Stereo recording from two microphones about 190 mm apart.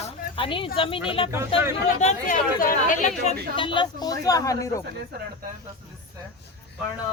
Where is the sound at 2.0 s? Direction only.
45° left (ahead or behind).